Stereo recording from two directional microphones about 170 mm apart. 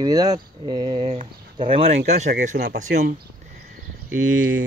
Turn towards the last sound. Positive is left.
turn(degrees=-50)  # may be behind; listen again after turning